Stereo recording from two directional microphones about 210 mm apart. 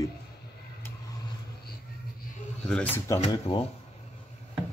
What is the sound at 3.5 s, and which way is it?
Speech, 25° left (ahead or behind).